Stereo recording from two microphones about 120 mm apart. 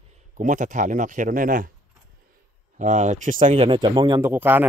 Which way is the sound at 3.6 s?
45° right (ahead or behind).